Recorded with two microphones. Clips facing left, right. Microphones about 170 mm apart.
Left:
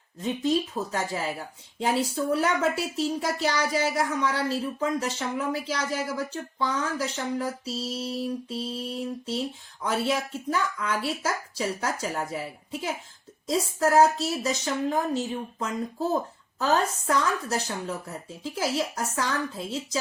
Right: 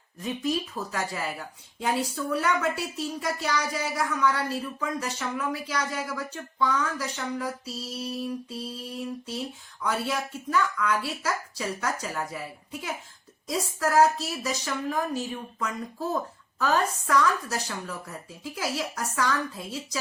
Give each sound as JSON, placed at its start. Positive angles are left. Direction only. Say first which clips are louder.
{"t": 0.2, "sound": "speech", "louder": "left 3 dB", "side_deg": 25}
{"t": 9.8, "sound": "speech", "louder": "left 2 dB", "side_deg": 25}
{"t": 13.5, "sound": "speech", "louder": "left 3 dB", "side_deg": 25}